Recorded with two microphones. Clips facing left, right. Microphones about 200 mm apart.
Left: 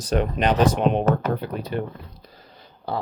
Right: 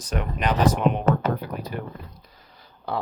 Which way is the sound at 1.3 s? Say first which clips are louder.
Left 4 dB; 25° left (ahead or behind).